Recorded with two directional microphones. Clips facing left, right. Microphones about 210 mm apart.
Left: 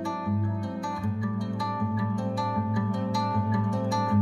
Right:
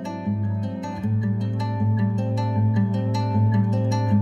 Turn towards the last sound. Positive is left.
turn(degrees=-20)  # may be behind; listen again after turning